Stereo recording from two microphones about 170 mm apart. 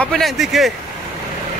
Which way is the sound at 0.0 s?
5° left (ahead or behind).